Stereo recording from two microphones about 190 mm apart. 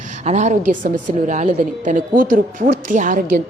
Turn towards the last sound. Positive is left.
turn(degrees=-45)  # may be behind; listen again after turning